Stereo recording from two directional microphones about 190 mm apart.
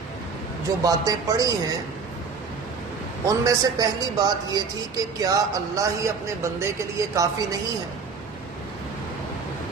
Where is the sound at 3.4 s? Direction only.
20° right (ahead or behind).